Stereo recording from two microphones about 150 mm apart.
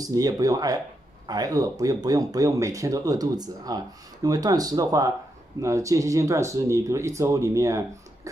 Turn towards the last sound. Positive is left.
turn(degrees=-20)  # may be behind; listen again after turning